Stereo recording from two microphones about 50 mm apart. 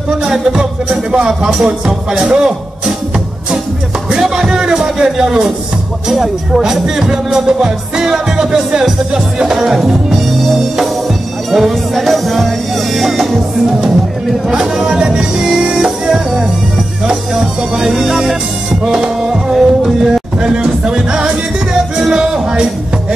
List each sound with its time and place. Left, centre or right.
0.1 s speech: centre
4.1 s speech: centre
17.0 s music: centre
20.5 s speech: centre
21.9 s music: centre